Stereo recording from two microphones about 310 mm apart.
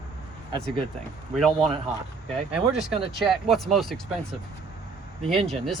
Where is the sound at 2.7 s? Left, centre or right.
Centre.